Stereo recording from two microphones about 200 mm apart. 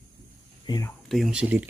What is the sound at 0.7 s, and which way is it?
Speech, 15° left (ahead or behind).